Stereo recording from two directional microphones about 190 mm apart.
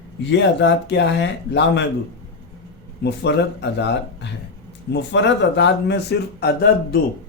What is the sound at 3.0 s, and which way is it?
Speech, 65° left (ahead or behind).